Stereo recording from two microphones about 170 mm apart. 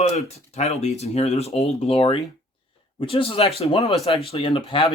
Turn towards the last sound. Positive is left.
turn(degrees=30)  # may be behind; listen again after turning